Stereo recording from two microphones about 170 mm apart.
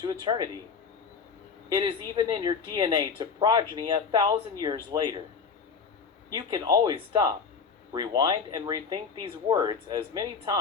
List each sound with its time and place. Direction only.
0.0 s speech: 25° right (ahead or behind)
1.7 s speech: 25° right (ahead or behind)
6.3 s speech: 25° right (ahead or behind)